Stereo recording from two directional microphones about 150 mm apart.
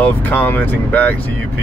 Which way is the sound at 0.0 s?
10° left (ahead or behind).